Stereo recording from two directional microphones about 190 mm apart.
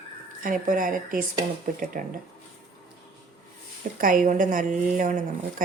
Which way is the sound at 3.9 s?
45° right (ahead or behind).